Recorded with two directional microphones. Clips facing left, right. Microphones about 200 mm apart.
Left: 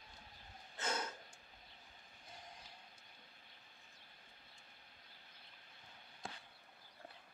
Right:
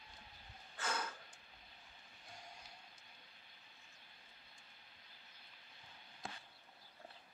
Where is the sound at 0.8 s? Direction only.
20° left (ahead or behind).